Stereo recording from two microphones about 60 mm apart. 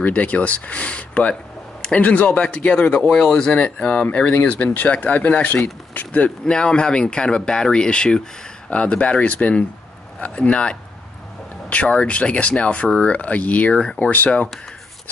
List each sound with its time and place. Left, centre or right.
0.0 s speech: left
6.4 s speech: centre